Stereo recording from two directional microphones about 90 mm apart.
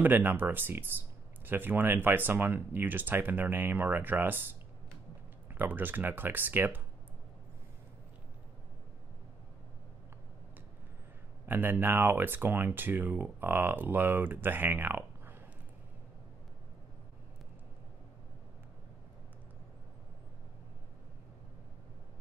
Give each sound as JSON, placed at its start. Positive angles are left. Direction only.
{"t": 0.0, "sound": "speech", "side_deg": -20}
{"t": 5.5, "sound": "speech", "side_deg": -20}
{"t": 11.4, "sound": "speech", "side_deg": -20}